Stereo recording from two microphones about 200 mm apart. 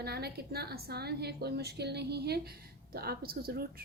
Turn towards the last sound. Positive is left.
turn(degrees=-50)  # may be behind; listen again after turning